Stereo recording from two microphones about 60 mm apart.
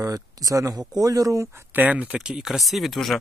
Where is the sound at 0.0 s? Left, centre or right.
Right.